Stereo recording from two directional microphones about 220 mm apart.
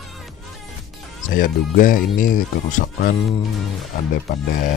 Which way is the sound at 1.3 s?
40° left (ahead or behind).